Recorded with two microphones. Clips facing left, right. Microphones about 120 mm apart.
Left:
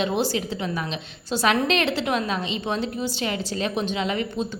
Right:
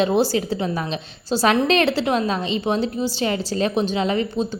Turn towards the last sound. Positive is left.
turn(degrees=-35)  # may be behind; listen again after turning